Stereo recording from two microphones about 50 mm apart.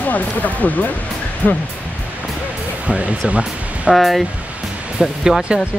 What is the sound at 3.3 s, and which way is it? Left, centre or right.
Music, right.